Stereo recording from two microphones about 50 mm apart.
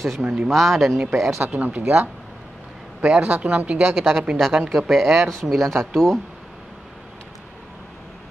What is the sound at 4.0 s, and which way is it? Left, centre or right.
Speech, centre.